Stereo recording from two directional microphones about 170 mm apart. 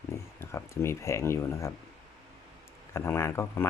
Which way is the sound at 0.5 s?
15° left (ahead or behind).